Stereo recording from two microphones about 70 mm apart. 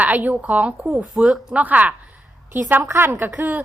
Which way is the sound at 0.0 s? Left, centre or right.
Right.